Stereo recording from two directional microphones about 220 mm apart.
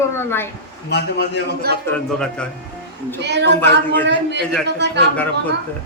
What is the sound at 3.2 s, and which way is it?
Speech, 50° right (ahead or behind).